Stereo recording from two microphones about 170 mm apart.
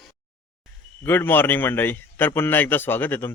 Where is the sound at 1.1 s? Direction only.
10° left (ahead or behind).